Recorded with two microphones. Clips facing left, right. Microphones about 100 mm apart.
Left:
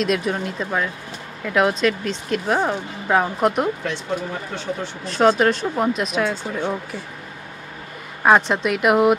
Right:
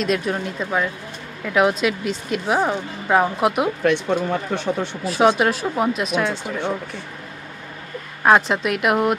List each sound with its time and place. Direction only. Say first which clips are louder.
0.0 s speech: even; centre (ahead or behind)
3.8 s speech: right 6 dB; 65° right (ahead or behind)
5.0 s speech: left 1 dB; 5° right (ahead or behind)
8.2 s speech: even; centre (ahead or behind)